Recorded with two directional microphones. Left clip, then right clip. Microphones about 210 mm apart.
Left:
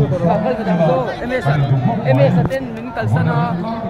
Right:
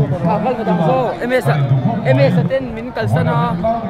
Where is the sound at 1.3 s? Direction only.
50° right (ahead or behind).